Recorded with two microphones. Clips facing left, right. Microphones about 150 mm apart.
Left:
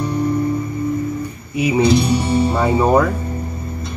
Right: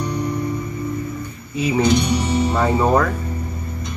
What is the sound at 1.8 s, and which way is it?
Speech, 30° left (ahead or behind).